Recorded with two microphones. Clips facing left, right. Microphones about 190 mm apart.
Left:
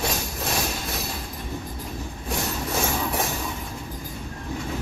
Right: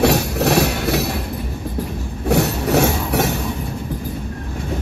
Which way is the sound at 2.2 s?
70° right (ahead or behind).